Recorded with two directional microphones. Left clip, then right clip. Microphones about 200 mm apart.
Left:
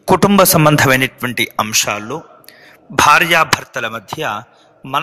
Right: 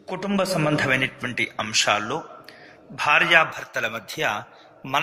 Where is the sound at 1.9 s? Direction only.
Centre (ahead or behind).